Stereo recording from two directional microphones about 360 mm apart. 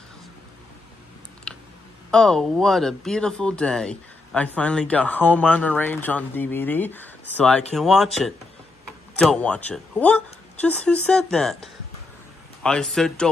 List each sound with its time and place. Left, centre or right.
1.5 s clicking: centre
2.0 s speech: centre